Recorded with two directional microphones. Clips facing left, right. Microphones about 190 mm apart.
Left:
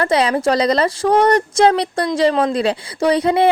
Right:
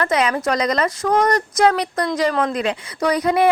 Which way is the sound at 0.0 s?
30° left (ahead or behind).